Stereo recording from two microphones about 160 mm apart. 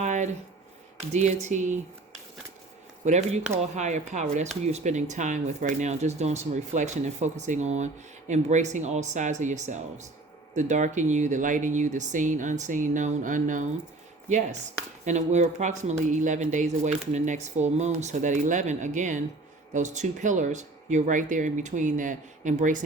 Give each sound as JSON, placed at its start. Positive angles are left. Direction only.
{"t": 0.0, "sound": "a sound", "side_deg": -50}
{"t": 1.1, "sound": "speech", "side_deg": -45}
{"t": 3.0, "sound": "speech", "side_deg": -45}
{"t": 15.0, "sound": "speech", "side_deg": -45}